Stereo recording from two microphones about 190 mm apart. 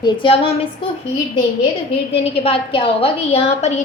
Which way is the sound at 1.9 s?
30° left (ahead or behind).